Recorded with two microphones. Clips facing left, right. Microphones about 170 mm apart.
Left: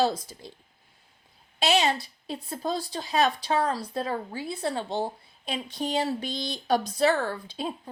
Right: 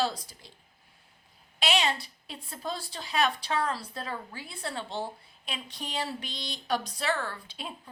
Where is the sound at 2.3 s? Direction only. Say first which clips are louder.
Left 7 dB; 40° left (ahead or behind).